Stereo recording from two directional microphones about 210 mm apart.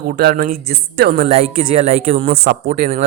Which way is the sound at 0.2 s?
45° right (ahead or behind).